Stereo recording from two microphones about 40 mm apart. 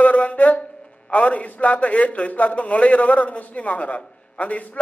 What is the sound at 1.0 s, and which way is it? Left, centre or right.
A man's voice, left.